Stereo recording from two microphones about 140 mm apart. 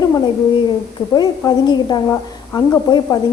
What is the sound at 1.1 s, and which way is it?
A woman's voice, 30° left (ahead or behind).